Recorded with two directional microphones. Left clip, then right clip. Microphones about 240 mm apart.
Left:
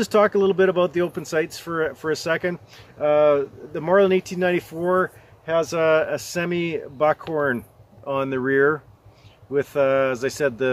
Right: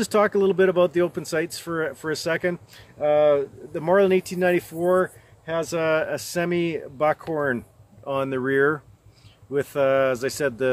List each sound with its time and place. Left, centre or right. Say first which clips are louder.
0.0 s speech: left 2 dB; centre